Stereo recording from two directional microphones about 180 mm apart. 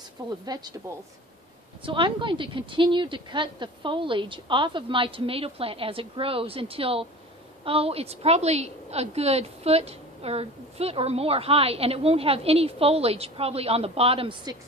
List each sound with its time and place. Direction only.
0.5 s a woman's voice: 20° right (ahead or behind)